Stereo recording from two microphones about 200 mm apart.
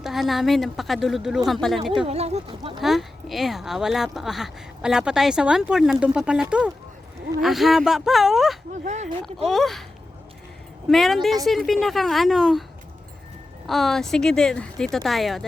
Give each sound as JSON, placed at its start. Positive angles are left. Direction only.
{"t": 0.0, "sound": "speech", "side_deg": 0}
{"t": 2.0, "sound": "speech", "side_deg": -30}
{"t": 2.8, "sound": "speech", "side_deg": 0}
{"t": 8.7, "sound": "speech", "side_deg": -35}
{"t": 9.5, "sound": "speech", "side_deg": 0}
{"t": 10.8, "sound": "speech", "side_deg": 0}
{"t": 13.7, "sound": "speech", "side_deg": 0}